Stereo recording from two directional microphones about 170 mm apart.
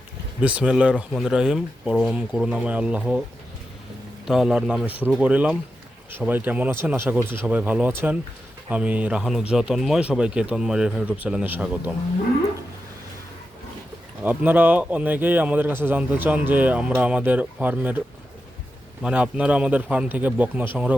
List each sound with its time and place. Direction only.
0.4 s speech: 5° right (ahead or behind)
4.3 s a man's voice: 5° right (ahead or behind)
14.2 s a man's voice: 10° right (ahead or behind)
19.0 s a man's voice: 5° right (ahead or behind)